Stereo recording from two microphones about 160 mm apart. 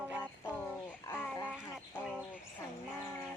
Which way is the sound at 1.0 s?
10° left (ahead or behind).